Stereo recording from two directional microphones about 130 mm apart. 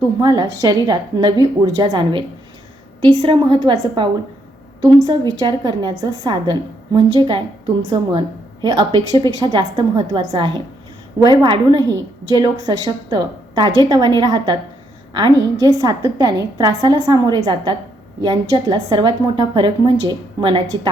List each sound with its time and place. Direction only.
0.2 s a woman's voice: 30° right (ahead or behind)
8.6 s a woman's voice: 35° right (ahead or behind)